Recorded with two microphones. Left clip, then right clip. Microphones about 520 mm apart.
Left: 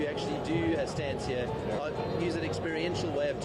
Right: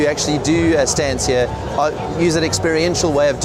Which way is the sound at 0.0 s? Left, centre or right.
Right.